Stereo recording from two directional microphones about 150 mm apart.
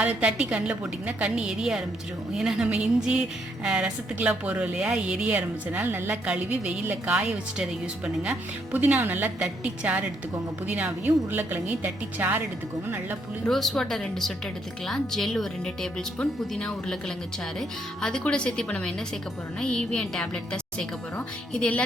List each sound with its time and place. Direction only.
0.0 s a woman's voice: 10° right (ahead or behind)
13.4 s a woman's voice: centre (ahead or behind)